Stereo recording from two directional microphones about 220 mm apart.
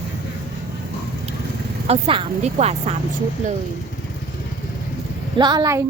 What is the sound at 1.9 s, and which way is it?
Speech, 25° right (ahead or behind).